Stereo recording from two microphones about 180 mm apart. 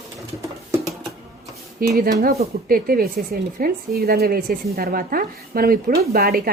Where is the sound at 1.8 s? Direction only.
55° right (ahead or behind).